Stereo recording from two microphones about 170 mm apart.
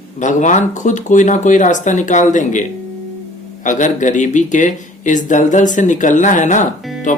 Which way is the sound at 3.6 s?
50° left (ahead or behind).